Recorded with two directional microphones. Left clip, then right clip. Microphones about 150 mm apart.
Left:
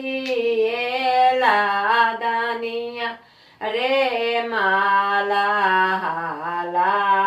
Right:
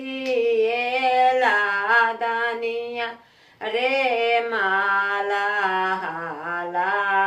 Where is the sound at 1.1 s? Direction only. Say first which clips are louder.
Left 3 dB; 15° right (ahead or behind).